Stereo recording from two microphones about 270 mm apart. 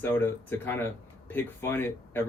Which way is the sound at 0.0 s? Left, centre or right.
Centre.